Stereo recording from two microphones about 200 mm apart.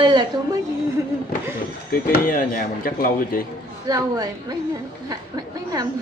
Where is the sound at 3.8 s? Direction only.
20° right (ahead or behind).